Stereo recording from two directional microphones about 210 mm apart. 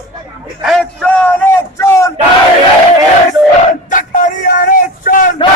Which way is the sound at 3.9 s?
40° left (ahead or behind).